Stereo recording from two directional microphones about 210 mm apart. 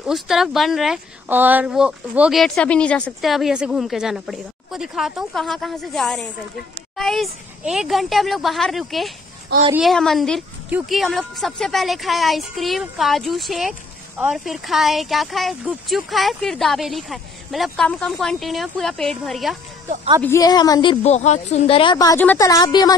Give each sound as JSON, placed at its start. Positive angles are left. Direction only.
{"t": 0.0, "sound": "speech", "side_deg": 0}
{"t": 20.2, "sound": "a woman's voice", "side_deg": 15}